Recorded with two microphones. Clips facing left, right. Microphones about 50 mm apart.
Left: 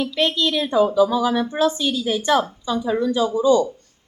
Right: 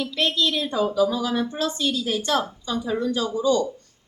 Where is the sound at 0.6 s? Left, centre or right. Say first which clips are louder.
Left 7 dB; left.